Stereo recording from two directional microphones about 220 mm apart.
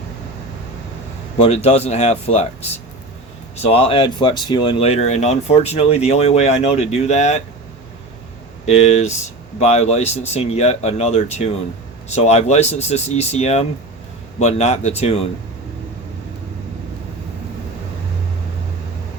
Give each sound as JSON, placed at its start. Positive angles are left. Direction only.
{"t": 1.4, "sound": "speech", "side_deg": 30}
{"t": 8.6, "sound": "speech", "side_deg": 30}